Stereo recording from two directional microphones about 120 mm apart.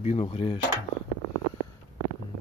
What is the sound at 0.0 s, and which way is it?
Speech, 60° left (ahead or behind).